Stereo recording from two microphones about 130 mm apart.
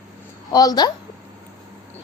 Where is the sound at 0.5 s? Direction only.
30° left (ahead or behind).